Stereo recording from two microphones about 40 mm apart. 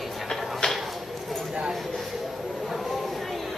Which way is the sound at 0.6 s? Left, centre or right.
Centre.